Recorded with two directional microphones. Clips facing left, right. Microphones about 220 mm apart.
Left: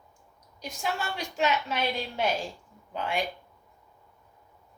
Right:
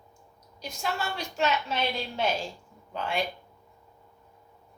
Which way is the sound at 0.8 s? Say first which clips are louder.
Even; 15° left (ahead or behind).